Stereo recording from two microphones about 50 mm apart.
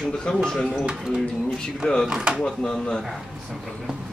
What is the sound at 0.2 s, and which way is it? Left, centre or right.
Speech, centre.